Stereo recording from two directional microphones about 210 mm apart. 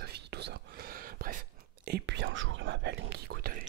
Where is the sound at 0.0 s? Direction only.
50° right (ahead or behind).